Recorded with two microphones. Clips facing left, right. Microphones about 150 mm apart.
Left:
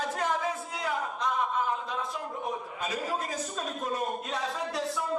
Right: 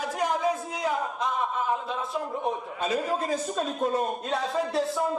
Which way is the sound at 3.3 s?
30° right (ahead or behind).